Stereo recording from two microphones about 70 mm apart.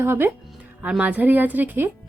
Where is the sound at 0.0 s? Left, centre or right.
Right.